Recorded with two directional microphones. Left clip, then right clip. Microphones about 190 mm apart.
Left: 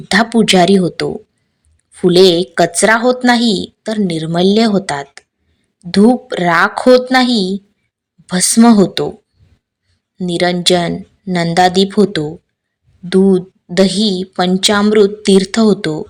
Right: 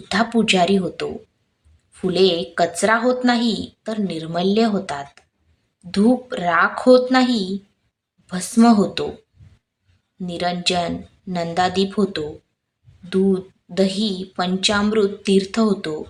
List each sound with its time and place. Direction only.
0.1 s a woman's voice: 35° left (ahead or behind)
10.2 s a woman's voice: 35° left (ahead or behind)